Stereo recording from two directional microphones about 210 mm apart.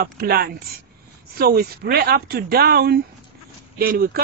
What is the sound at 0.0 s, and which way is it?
Speech, 45° right (ahead or behind).